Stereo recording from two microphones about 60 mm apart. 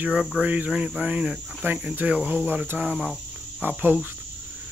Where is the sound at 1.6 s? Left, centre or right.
Right.